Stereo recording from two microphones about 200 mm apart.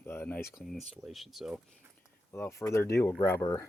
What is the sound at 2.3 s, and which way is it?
Speech, 15° left (ahead or behind).